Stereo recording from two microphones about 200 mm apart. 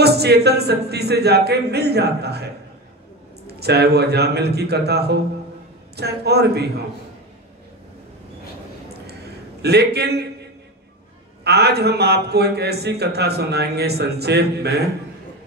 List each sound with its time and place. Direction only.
0.0 s a man's voice: 55° right (ahead or behind)
9.0 s a sound: 55° right (ahead or behind)
11.4 s a man's voice: 55° right (ahead or behind)